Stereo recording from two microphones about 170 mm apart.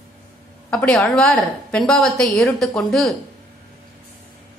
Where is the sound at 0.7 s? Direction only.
5° left (ahead or behind).